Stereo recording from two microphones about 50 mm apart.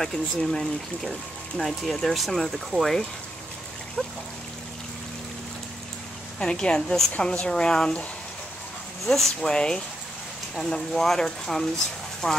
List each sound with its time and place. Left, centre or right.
0.0 s speech: centre
6.4 s a woman's voice: centre
9.0 s speech: centre